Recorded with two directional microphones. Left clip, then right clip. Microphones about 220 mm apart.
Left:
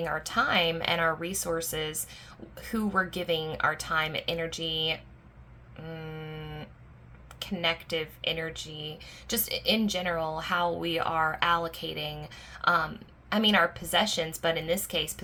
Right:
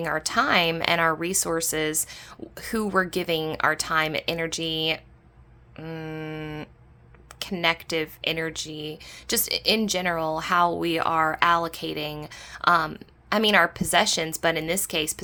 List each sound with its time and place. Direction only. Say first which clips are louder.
0.0 s speech: right 4 dB; 45° right (ahead or behind)